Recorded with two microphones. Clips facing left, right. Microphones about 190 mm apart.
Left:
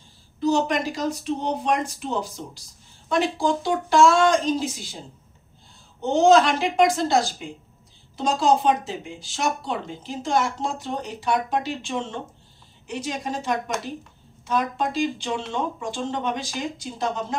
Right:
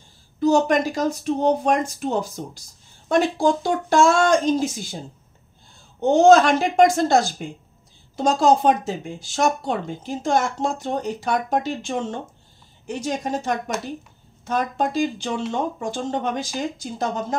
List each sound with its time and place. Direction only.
0.4 s speech: 45° right (ahead or behind)
5.9 s speech: 45° right (ahead or behind)